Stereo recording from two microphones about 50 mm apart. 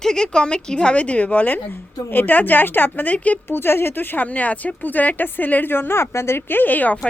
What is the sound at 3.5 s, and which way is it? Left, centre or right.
Speech, left.